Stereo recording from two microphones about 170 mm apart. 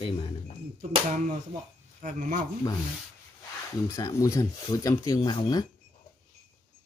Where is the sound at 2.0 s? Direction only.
50° right (ahead or behind).